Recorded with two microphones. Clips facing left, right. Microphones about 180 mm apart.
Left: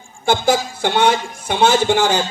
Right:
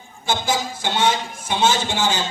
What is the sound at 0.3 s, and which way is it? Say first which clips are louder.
A man's voice: left 6 dB; 60° left (ahead or behind).